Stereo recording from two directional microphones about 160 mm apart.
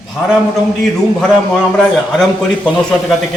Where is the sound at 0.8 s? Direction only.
Centre (ahead or behind).